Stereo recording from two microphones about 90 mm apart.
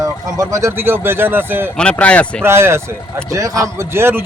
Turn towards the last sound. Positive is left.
turn(degrees=-25)  # may be behind; listen again after turning